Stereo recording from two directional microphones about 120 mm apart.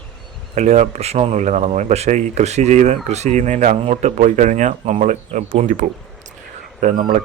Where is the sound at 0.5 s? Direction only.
75° right (ahead or behind).